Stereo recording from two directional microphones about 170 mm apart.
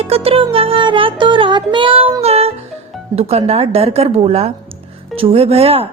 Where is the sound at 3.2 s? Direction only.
35° right (ahead or behind).